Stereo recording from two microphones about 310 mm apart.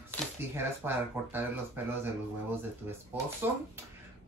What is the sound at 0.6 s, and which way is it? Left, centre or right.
Speech, centre.